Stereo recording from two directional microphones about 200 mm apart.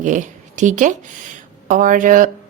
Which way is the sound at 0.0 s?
40° right (ahead or behind).